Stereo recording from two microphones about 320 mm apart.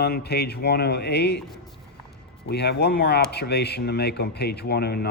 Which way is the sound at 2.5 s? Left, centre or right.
Left.